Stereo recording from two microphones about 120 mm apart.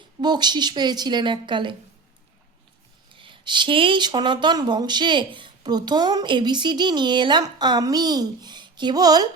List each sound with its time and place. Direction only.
0.2 s speech: 35° right (ahead or behind)
3.1 s speech: 45° right (ahead or behind)